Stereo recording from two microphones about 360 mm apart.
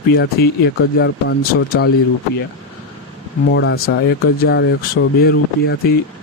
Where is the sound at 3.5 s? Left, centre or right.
Left.